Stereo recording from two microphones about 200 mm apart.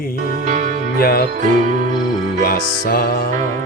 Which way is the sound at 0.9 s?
50° left (ahead or behind).